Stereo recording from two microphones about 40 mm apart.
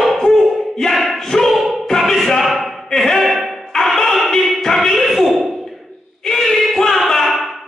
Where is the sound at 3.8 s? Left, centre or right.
Centre.